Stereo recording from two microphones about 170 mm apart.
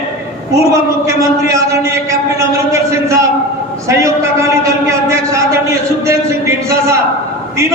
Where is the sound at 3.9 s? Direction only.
15° right (ahead or behind).